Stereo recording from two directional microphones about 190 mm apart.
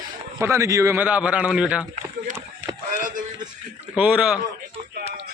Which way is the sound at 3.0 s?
40° right (ahead or behind).